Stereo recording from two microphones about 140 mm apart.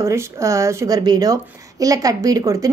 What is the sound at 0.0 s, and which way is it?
A woman's voice, 20° right (ahead or behind).